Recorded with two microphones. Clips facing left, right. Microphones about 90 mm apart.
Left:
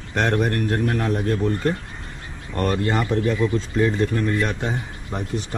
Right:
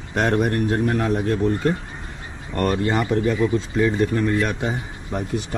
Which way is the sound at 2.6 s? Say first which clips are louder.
Right 1 dB; 5° right (ahead or behind).